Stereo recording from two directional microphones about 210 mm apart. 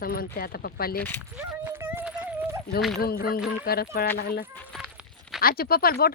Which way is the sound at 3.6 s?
45° left (ahead or behind).